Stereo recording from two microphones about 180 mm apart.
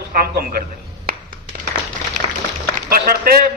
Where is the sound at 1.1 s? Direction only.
55° right (ahead or behind).